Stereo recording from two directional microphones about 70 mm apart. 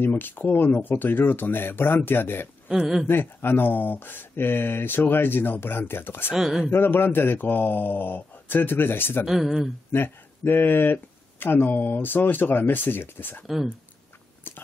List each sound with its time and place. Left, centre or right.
0.0 s speech: left
2.7 s speech: centre
3.1 s speech: left
6.3 s speech: centre
6.7 s speech: left
9.2 s speech: centre
9.9 s speech: left
14.5 s whispering: left